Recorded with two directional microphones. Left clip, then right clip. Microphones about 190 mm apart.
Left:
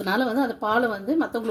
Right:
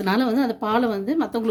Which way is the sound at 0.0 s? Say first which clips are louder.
Right 2 dB; 50° right (ahead or behind).